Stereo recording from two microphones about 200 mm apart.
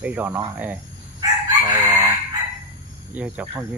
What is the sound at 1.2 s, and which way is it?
Chicken, 20° right (ahead or behind).